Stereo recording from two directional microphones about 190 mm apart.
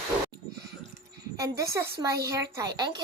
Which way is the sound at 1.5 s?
15° right (ahead or behind).